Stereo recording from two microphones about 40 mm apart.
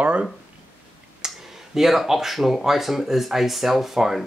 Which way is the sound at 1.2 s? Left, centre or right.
Centre.